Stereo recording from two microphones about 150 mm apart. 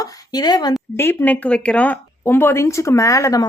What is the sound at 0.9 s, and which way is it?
A woman's voice, 10° left (ahead or behind).